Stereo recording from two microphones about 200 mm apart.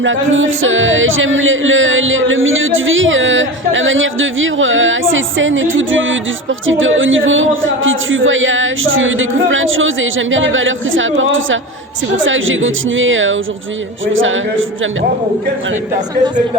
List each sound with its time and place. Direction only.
0.0 s speech: 75° right (ahead or behind)